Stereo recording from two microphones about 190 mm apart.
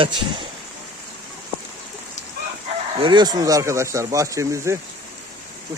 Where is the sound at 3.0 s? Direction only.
20° right (ahead or behind).